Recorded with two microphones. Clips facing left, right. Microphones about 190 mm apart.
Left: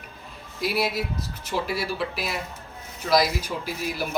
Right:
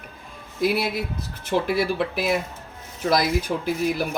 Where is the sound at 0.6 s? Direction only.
55° right (ahead or behind).